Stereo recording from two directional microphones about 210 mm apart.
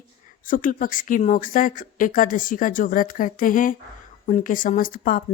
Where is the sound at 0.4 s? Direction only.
40° left (ahead or behind).